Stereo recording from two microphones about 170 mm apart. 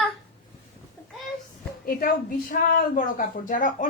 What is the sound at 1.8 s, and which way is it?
Speech, 55° left (ahead or behind).